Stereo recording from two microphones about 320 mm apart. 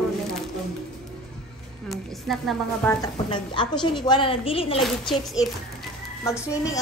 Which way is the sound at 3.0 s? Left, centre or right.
Centre.